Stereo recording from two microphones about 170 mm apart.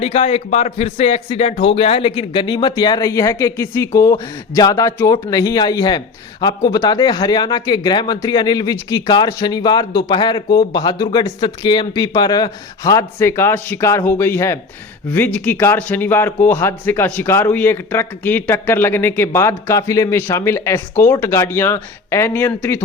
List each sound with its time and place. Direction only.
0.0 s a man's voice: 40° left (ahead or behind); by 22.8 s 15° left (ahead or behind)